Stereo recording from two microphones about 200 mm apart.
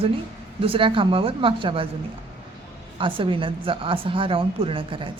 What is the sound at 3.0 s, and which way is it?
A woman's voice, 25° right (ahead or behind).